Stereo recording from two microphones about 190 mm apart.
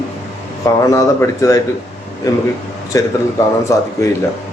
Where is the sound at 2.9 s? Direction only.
15° left (ahead or behind).